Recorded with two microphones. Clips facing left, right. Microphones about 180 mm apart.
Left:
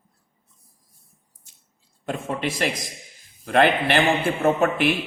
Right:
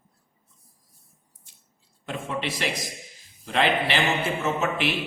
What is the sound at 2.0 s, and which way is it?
A man's voice, 45° left (ahead or behind).